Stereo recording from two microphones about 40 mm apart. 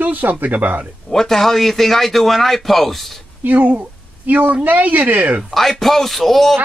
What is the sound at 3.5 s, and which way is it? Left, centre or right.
Speech, right.